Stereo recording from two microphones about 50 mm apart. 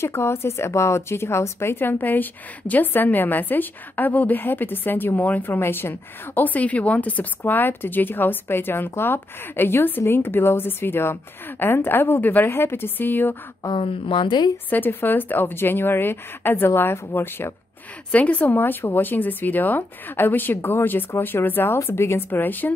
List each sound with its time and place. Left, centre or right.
0.0 s speech: left
6.5 s speech: left
12.4 s speech: left
13.6 s speech: left
14.7 s speech: left
18.1 s speech: left
18.6 s speech: left
21.7 s a woman's voice: left
22.3 s speech: left